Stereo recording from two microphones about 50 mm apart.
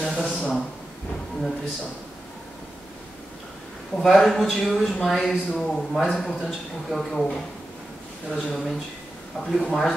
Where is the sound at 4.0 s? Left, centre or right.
Centre.